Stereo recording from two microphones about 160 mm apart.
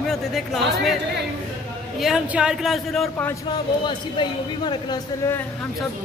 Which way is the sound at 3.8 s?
30° left (ahead or behind).